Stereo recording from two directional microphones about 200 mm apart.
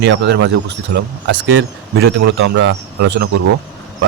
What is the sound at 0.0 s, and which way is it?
Speech, 60° right (ahead or behind).